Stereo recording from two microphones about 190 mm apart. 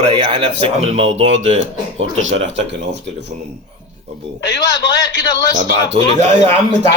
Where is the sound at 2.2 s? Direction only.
80° right.